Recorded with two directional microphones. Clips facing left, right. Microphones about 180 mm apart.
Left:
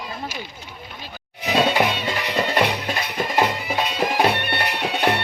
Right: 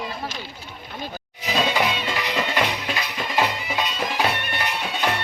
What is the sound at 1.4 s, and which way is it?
Music, 55° left (ahead or behind).